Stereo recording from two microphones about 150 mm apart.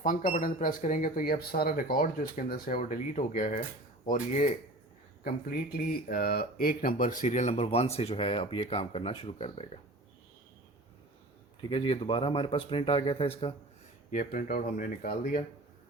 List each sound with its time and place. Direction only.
0.0 s speech: 65° left (ahead or behind)
2.7 s speech: 55° left (ahead or behind)
5.2 s speech: 80° left; by 9.6 s 40° left (ahead or behind)
11.7 s speech: 35° left (ahead or behind)
14.1 s speech: 65° left (ahead or behind)